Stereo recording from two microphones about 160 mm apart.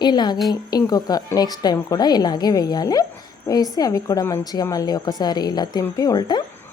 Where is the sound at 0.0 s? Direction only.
25° left (ahead or behind).